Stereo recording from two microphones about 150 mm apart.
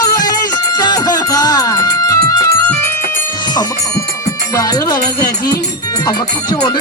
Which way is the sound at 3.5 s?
25° left (ahead or behind).